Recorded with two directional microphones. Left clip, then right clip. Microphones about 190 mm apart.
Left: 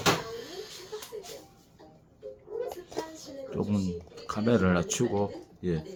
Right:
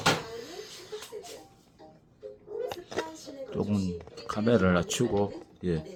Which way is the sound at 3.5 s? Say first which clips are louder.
Even; 5° right (ahead or behind).